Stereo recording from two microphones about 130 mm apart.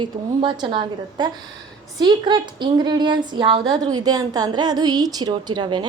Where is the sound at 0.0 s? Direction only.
35° right (ahead or behind).